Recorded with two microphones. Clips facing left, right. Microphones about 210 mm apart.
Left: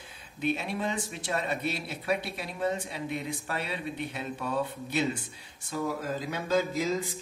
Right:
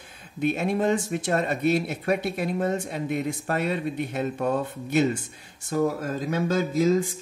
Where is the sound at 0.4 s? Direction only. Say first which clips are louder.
Right 7 dB; 50° right (ahead or behind).